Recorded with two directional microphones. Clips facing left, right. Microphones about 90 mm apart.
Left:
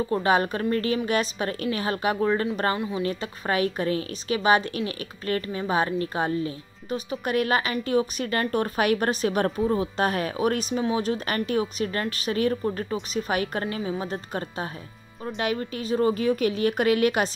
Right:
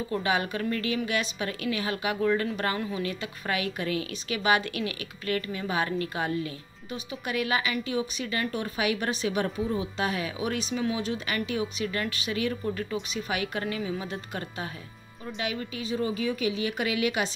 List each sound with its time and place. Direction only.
0.1 s a woman's voice: 40° left (ahead or behind)